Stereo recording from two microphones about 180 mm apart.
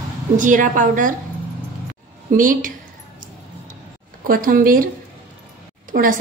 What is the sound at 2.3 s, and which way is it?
Speech, 50° right (ahead or behind).